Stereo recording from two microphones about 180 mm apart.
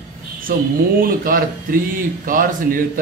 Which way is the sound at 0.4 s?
50° right (ahead or behind).